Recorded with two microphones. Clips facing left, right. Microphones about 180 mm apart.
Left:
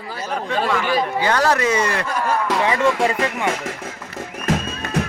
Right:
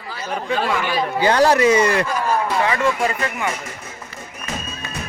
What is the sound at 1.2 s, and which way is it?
Speech, 15° right (ahead or behind).